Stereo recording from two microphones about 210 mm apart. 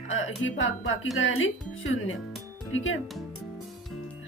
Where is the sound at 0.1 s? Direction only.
65° left (ahead or behind).